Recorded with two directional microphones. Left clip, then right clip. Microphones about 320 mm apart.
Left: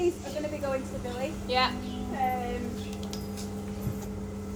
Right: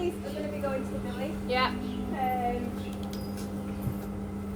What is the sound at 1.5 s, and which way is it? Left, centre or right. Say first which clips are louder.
Speech: left 1 dB; left.